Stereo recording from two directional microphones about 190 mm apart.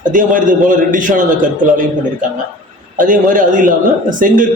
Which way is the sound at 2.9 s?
45° right (ahead or behind).